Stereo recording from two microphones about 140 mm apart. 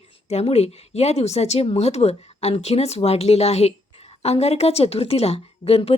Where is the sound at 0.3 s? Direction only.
50° left (ahead or behind).